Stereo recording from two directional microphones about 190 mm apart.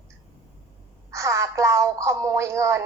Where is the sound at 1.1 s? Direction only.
15° right (ahead or behind).